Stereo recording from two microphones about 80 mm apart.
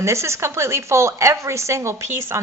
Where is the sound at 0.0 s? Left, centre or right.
Right.